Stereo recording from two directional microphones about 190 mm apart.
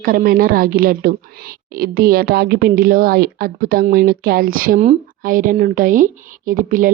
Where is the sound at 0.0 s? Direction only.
50° right (ahead or behind).